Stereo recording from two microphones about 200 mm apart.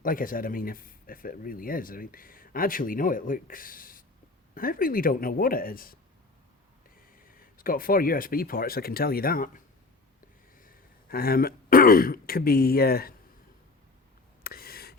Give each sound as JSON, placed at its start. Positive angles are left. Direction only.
{"t": 0.0, "sound": "speech", "side_deg": 45}
{"t": 7.2, "sound": "speech", "side_deg": 45}
{"t": 10.6, "sound": "speech", "side_deg": 45}
{"t": 14.4, "sound": "a sound", "side_deg": 50}